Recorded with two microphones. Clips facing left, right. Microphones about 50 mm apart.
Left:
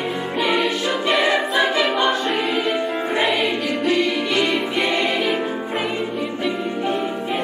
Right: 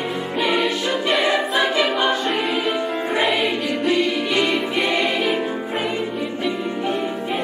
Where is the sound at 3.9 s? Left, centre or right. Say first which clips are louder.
Even; centre.